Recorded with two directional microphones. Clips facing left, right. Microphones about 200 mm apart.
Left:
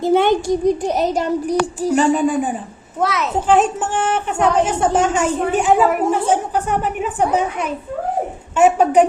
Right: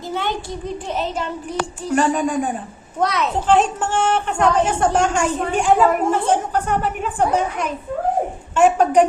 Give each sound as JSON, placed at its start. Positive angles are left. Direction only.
{"t": 0.0, "sound": "a child's voice", "side_deg": 55}
{"t": 1.9, "sound": "a woman's voice", "side_deg": 5}